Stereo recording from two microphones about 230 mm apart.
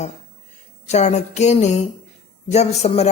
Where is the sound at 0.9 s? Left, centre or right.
Left.